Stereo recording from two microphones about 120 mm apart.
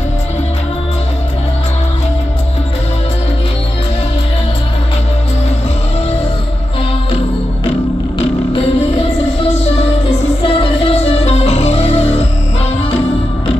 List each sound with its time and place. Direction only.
10.4 s music: 45° left (ahead or behind)